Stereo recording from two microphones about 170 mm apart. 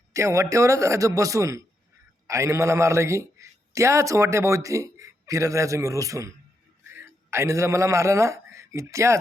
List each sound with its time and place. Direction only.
0.1 s a man's voice: 20° right (ahead or behind)